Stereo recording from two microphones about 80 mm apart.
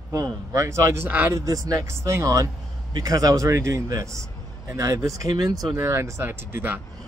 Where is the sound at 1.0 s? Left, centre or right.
Right.